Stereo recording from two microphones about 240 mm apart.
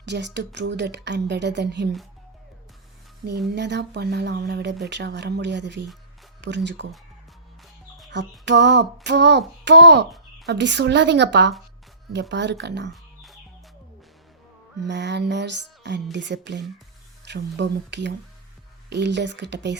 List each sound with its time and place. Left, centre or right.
0.0 s speech: right
3.2 s speech: right
8.1 s speech: right
14.8 s speech: right